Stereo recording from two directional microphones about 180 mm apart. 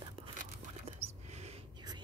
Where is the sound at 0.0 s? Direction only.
30° right (ahead or behind).